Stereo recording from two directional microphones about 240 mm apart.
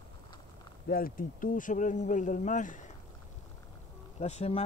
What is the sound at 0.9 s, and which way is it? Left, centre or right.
Speech, left.